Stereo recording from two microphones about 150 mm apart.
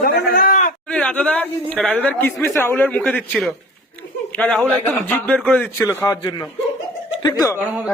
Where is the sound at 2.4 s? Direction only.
15° left (ahead or behind).